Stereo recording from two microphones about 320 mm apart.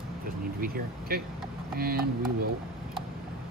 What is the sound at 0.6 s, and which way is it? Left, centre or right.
Speech, right.